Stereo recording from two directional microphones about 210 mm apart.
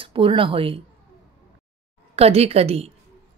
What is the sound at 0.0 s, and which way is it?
Speech, 25° right (ahead or behind).